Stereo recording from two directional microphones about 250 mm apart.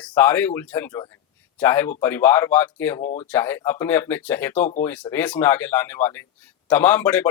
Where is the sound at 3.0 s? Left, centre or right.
Left.